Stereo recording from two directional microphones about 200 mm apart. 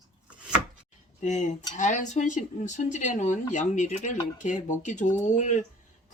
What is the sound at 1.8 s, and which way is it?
A woman's voice, 40° left (ahead or behind).